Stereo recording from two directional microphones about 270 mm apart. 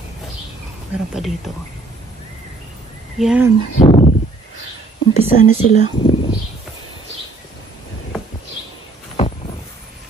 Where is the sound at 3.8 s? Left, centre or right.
Left.